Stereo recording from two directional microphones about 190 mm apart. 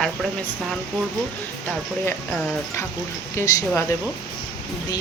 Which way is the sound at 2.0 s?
10° left (ahead or behind).